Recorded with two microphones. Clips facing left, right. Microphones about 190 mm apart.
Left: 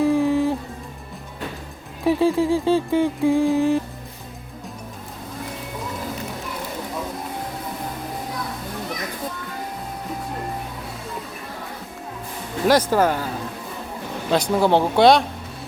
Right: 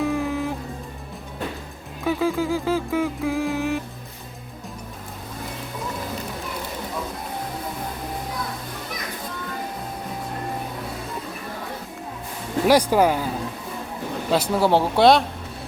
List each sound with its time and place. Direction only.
0.0 s music: 30° left (ahead or behind)
2.0 s music: 30° left (ahead or behind)
12.6 s speech: 10° right (ahead or behind)
14.3 s speech: 5° right (ahead or behind)